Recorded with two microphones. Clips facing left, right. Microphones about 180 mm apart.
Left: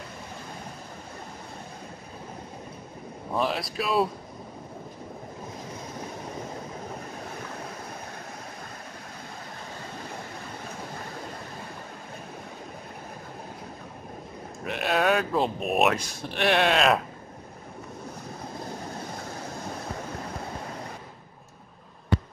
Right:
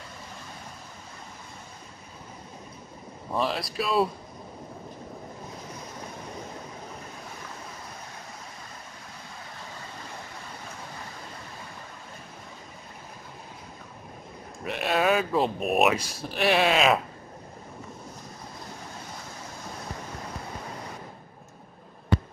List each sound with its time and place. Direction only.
3.3 s speech: centre (ahead or behind)
14.6 s speech: centre (ahead or behind)